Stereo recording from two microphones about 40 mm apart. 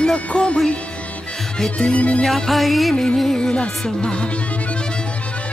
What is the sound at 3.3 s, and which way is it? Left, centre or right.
Music, centre.